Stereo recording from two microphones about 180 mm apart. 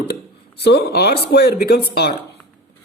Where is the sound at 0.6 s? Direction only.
65° left (ahead or behind).